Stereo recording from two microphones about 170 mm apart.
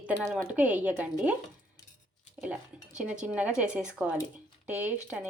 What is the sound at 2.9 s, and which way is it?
Speech, 5° right (ahead or behind).